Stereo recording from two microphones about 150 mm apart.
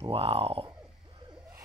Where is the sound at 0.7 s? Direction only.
30° right (ahead or behind).